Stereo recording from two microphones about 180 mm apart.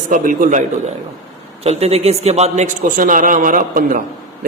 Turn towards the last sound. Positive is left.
turn(degrees=-50)  # may be behind; listen again after turning